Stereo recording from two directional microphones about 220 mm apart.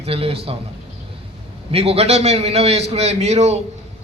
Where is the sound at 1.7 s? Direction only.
25° right (ahead or behind).